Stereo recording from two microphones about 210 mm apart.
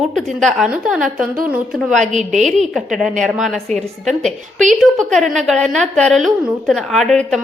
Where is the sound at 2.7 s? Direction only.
Centre (ahead or behind).